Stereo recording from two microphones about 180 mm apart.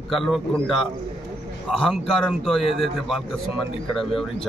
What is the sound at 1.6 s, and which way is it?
Speech, centre (ahead or behind).